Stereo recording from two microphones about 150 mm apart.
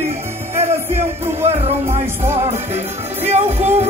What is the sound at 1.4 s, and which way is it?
Music, 45° right (ahead or behind).